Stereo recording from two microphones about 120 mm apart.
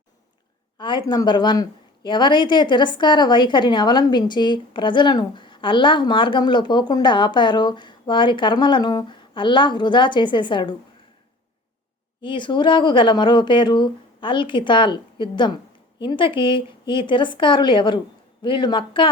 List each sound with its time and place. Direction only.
0.8 s speech: 40° left (ahead or behind)
12.2 s speech: 40° left (ahead or behind)